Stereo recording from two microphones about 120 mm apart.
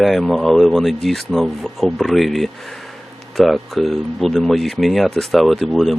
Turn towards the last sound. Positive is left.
turn(degrees=0)  # may be behind; listen again after turning